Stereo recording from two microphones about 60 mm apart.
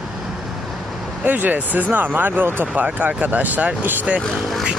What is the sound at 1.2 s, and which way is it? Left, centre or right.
Speech, right.